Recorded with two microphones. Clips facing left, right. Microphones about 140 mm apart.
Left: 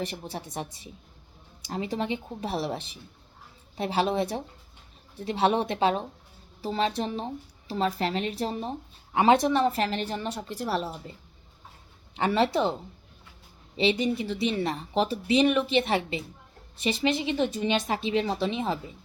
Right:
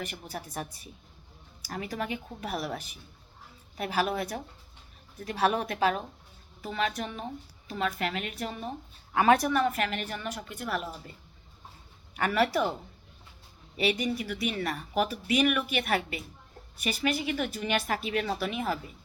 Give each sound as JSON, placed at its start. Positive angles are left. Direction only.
{"t": 0.0, "sound": "speech", "side_deg": 30}
{"t": 12.1, "sound": "speech", "side_deg": 25}
{"t": 13.7, "sound": "speech", "side_deg": 25}